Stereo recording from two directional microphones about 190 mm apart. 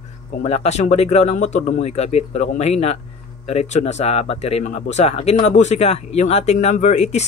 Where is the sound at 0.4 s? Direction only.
35° left (ahead or behind).